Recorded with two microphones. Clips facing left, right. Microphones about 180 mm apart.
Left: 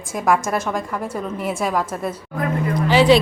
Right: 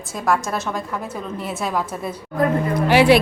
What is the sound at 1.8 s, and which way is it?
Speech, 5° right (ahead or behind).